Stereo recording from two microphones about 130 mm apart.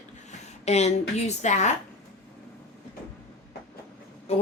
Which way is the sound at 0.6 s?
55° left (ahead or behind).